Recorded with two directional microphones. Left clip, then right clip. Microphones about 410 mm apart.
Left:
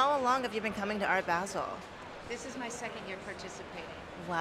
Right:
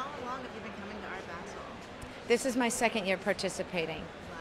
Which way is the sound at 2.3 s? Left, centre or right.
Right.